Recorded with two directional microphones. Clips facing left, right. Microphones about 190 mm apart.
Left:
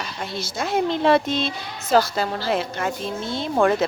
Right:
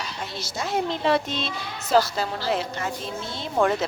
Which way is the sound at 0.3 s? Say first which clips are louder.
Left 4 dB; 50° left (ahead or behind).